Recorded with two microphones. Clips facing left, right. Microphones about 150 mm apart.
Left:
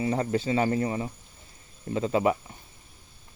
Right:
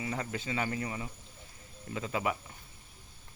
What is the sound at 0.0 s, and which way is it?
Speech, 35° left (ahead or behind).